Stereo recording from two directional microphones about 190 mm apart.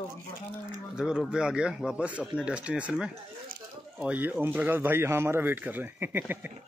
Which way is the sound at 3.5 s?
45° right (ahead or behind).